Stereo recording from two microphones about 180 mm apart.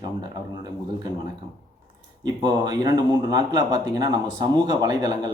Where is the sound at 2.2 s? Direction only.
25° right (ahead or behind).